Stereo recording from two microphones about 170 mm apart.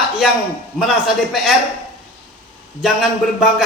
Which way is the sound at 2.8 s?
Centre (ahead or behind).